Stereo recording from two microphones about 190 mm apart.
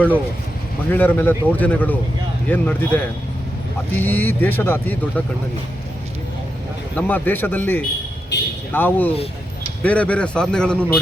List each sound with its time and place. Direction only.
0.9 s speech: 10° left (ahead or behind)
6.9 s speech: 10° left (ahead or behind)
8.3 s vehicle: 65° left (ahead or behind)
8.7 s a man's voice: 10° left (ahead or behind)